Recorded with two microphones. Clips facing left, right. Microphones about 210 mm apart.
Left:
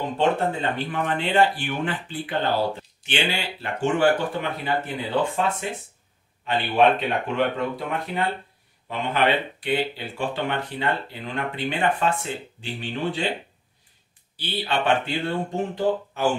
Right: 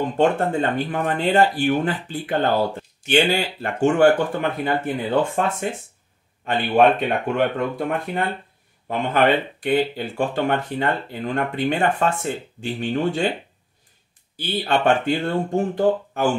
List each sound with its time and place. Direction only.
0.2 s speech: 50° right (ahead or behind)
14.3 s speech: 50° right (ahead or behind)